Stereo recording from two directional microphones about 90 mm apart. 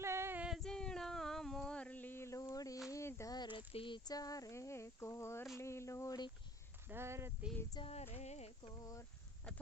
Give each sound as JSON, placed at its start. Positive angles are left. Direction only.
{"t": 0.0, "sound": "female singing", "side_deg": -30}
{"t": 0.3, "sound": "female singing", "side_deg": -10}
{"t": 0.6, "sound": "a sound", "side_deg": 5}
{"t": 3.3, "sound": "a sound", "side_deg": 60}
{"t": 4.1, "sound": "speech", "side_deg": 45}
{"t": 5.5, "sound": "a sound", "side_deg": 30}
{"t": 6.9, "sound": "speech", "side_deg": -30}
{"t": 7.8, "sound": "female singing", "side_deg": 90}
{"t": 8.8, "sound": "speech", "side_deg": 40}